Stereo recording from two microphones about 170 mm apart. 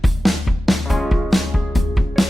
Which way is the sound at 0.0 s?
Centre (ahead or behind).